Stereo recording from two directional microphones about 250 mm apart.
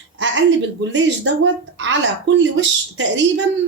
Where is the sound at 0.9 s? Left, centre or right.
Right.